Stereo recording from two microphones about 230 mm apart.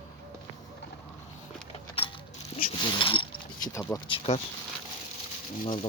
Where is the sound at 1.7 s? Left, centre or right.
Left.